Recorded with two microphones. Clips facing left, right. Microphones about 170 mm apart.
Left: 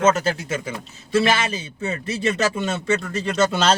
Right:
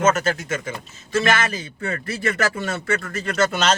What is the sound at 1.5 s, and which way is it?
Speech, 25° left (ahead or behind).